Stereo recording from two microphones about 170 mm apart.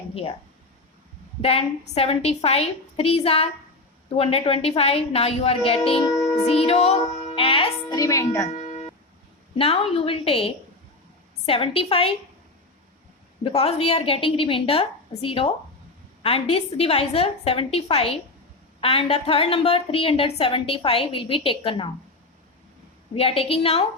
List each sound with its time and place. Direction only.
0.1 s speech: 35° left (ahead or behind)
1.4 s a woman's voice: 35° left (ahead or behind); by 8.4 s 20° left (ahead or behind)
8.4 s telephone: 45° left (ahead or behind)
9.6 s a woman's voice: 35° left (ahead or behind)
13.4 s a woman's voice: 35° left (ahead or behind)
23.1 s a woman's voice: 35° left (ahead or behind)